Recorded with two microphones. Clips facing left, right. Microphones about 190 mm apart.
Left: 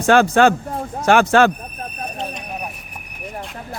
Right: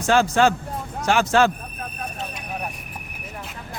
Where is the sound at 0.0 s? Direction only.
60° left (ahead or behind).